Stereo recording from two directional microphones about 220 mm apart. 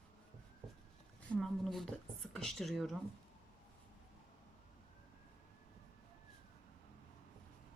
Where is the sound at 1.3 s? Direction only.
Centre (ahead or behind).